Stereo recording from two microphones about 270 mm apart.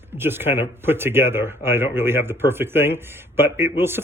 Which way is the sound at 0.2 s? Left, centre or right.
Centre.